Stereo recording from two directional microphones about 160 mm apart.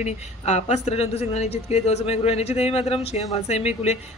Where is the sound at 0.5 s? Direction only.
45° left (ahead or behind).